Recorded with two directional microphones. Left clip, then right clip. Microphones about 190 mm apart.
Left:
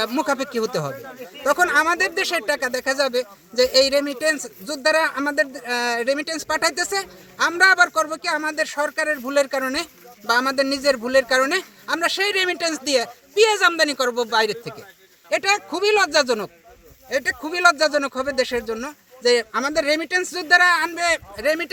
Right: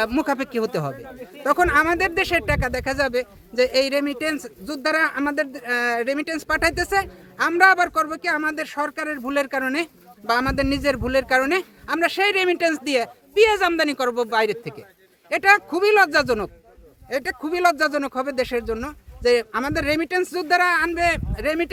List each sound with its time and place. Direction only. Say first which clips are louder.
0.0 s speech: even; 30° right (ahead or behind)
15.5 s speech: right 2 dB; centre (ahead or behind)
16.1 s speech: left 1 dB; 25° right (ahead or behind)